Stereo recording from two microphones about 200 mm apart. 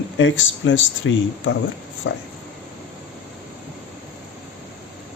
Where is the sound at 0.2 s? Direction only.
75° left (ahead or behind).